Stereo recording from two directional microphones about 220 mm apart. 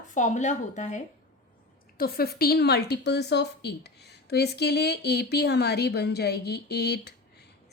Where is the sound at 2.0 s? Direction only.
45° left (ahead or behind).